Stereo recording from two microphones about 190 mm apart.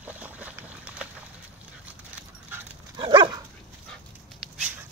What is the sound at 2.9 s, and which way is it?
Dog, 25° right (ahead or behind).